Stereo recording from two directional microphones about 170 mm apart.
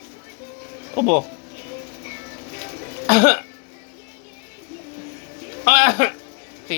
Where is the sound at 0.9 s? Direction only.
45° right (ahead or behind).